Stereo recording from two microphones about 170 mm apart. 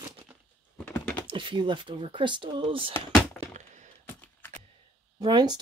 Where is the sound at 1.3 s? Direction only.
30° right (ahead or behind).